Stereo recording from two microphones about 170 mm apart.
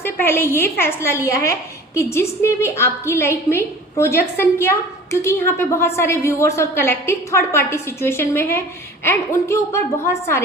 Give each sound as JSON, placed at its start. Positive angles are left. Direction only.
{"t": 0.0, "sound": "a woman's voice", "side_deg": 15}